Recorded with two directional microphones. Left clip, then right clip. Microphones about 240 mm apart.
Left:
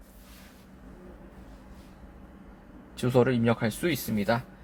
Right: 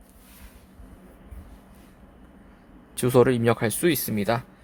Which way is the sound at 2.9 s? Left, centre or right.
Right.